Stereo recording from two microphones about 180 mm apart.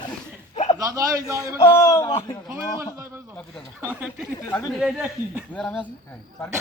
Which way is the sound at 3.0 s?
10° right (ahead or behind).